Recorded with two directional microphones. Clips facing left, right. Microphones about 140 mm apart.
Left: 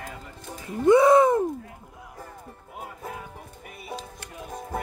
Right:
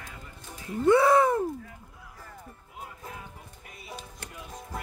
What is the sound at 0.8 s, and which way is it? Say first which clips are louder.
Speech: left 4 dB; 20° left (ahead or behind).